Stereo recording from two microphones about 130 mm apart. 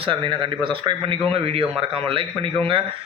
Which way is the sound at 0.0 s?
40° right (ahead or behind).